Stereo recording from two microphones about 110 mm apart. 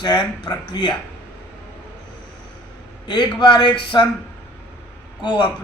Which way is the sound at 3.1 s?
45° left (ahead or behind).